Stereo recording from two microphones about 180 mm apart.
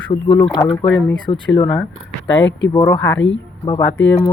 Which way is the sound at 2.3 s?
90° left.